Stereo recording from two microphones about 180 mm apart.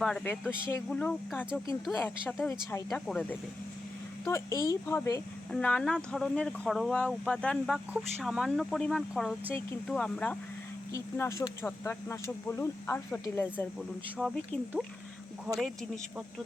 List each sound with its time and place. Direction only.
0.0 s speech: 5° left (ahead or behind)
2.9 s speech: 5° left (ahead or behind)
4.3 s speech: 15° left (ahead or behind)
5.5 s speech: 5° left (ahead or behind)
10.9 s speech: 15° left (ahead or behind)
14.2 s speech: centre (ahead or behind)